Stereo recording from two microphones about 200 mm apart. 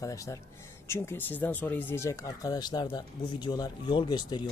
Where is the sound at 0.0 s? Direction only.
15° left (ahead or behind).